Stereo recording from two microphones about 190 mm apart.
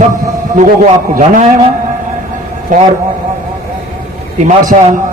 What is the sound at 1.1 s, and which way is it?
Speech, 40° right (ahead or behind).